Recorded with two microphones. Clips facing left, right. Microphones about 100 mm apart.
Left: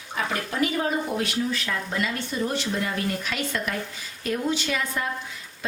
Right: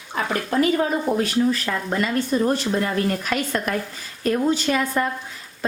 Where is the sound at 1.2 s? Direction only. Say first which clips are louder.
Right 6 dB; 40° right (ahead or behind).